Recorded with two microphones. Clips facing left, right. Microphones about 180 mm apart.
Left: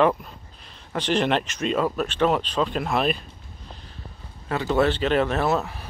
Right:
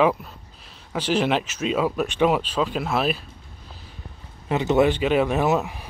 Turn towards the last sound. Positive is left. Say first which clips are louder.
# right 2 dB
turn(degrees=-15)  # may be behind; listen again after turning